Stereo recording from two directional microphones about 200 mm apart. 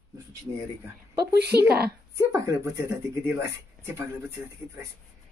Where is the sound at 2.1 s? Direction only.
15° right (ahead or behind).